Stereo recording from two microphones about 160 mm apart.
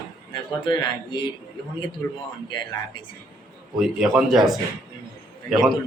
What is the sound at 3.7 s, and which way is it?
Speech, 5° right (ahead or behind).